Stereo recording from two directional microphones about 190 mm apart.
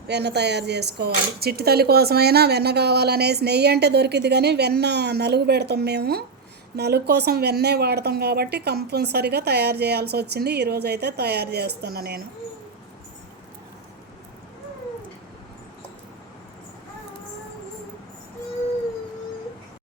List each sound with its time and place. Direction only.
0.1 s speech: 60° right (ahead or behind)